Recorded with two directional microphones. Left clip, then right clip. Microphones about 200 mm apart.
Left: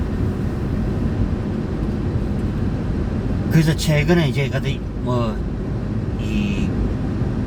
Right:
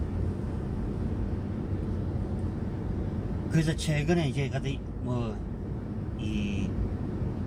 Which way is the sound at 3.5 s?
20° right (ahead or behind).